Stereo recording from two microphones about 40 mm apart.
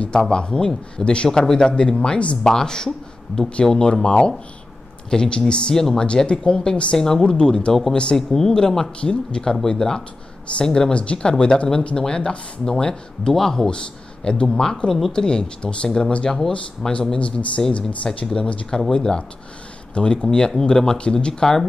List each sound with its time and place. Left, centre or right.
0.3 s speech: left
1.4 s speech: centre
1.7 s speech: left
2.4 s speech: centre
10.9 s speech: left
16.3 s speech: centre
17.2 s speech: left; by 21.6 s centre